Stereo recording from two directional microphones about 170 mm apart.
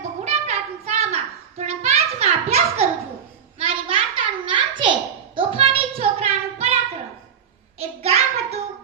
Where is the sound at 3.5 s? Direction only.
35° right (ahead or behind).